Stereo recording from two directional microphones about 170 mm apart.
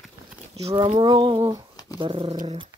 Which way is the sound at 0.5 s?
35° right (ahead or behind).